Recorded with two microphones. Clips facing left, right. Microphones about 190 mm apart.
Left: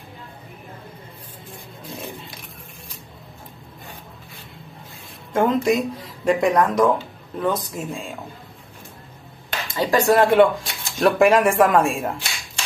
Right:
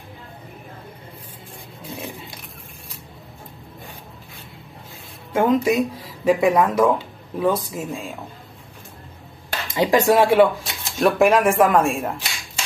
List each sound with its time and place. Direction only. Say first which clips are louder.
5.3 s speech: right 1 dB; 5° right (ahead or behind)
9.8 s speech: right 1 dB; 15° right (ahead or behind)
10.1 s speech: left 2 dB; 5° right (ahead or behind)